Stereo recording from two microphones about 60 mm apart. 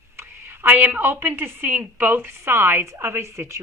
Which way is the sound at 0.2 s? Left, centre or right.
Right.